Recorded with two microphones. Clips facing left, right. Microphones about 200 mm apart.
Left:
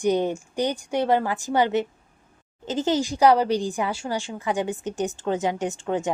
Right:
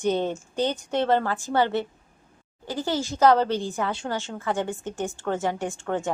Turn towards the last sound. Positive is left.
turn(degrees=15)  # may be behind; listen again after turning